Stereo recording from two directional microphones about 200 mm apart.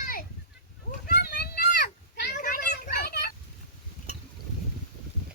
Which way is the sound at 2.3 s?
45° left (ahead or behind).